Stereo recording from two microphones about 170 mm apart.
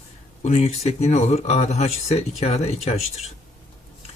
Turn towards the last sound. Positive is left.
turn(degrees=40)  # may be behind; listen again after turning